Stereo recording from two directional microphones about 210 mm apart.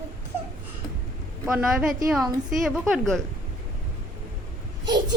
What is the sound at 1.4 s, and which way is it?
A woman's voice, 5° right (ahead or behind).